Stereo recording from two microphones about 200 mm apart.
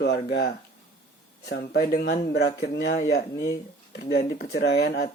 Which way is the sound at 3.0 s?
40° left (ahead or behind).